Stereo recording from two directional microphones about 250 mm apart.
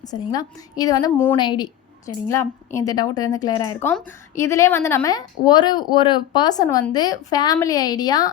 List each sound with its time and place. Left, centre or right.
0.1 s a woman's voice: centre